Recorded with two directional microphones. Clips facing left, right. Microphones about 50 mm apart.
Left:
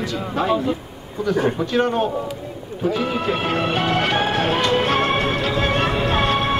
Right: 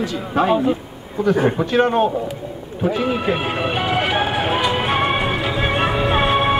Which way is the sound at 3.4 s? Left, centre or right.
Centre.